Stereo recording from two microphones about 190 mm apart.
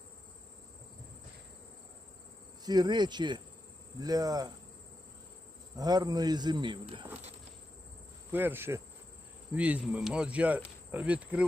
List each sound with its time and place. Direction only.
2.6 s speech: 20° right (ahead or behind)
5.7 s speech: 20° right (ahead or behind)
8.3 s cricket: 10° right (ahead or behind)